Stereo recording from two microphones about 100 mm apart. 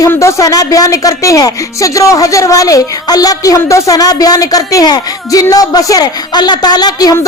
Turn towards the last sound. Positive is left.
turn(degrees=40)  # may be behind; listen again after turning